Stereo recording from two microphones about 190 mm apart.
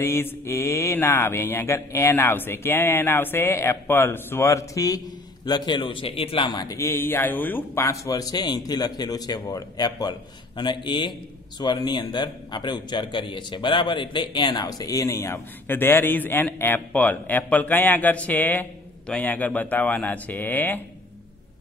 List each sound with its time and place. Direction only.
0.0 s mantra: 15° left (ahead or behind)
10.6 s speech: 25° left (ahead or behind)
11.6 s mantra: 20° left (ahead or behind)